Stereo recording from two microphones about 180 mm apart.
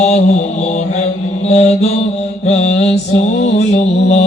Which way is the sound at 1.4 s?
40° left (ahead or behind).